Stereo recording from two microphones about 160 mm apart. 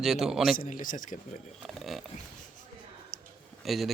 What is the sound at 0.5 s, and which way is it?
Speech, 60° left (ahead or behind).